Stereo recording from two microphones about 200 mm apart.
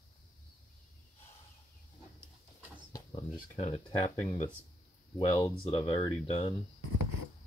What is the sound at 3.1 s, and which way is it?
Speech, 30° left (ahead or behind).